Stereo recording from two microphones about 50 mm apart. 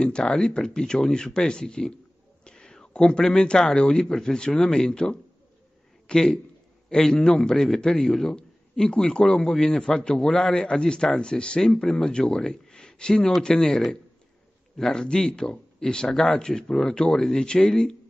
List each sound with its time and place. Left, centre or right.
0.0 s a man's voice: centre